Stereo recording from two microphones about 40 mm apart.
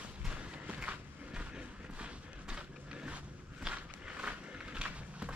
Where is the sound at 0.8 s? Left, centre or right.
Right.